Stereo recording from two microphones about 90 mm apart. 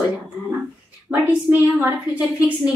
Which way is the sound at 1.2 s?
20° right (ahead or behind).